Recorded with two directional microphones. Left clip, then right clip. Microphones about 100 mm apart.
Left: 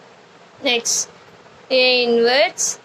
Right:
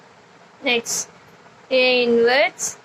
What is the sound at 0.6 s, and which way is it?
A woman's voice, 35° left (ahead or behind).